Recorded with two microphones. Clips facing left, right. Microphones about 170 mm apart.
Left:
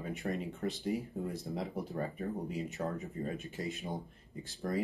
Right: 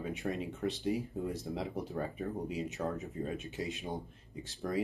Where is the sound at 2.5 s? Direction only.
Centre (ahead or behind).